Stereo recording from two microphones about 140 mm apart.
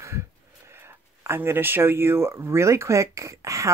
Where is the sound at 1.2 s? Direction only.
15° right (ahead or behind).